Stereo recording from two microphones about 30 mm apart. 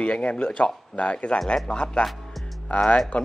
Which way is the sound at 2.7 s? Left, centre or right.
Left.